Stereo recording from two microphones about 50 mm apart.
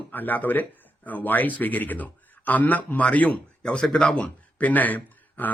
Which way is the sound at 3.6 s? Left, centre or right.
Centre.